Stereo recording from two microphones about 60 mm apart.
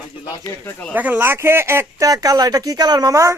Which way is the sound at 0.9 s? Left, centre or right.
Right.